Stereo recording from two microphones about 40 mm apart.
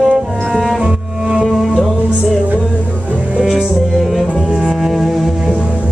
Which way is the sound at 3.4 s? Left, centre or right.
Centre.